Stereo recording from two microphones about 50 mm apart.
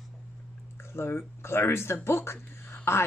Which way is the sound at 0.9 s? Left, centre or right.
Left.